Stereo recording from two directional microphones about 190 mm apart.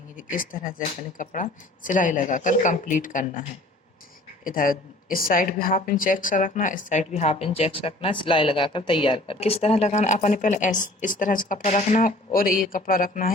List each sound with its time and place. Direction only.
0.2 s speech: 45° left (ahead or behind)
4.4 s a woman's voice: 45° left (ahead or behind)